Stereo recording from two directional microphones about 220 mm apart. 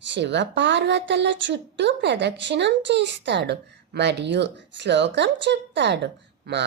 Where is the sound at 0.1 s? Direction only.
50° right (ahead or behind).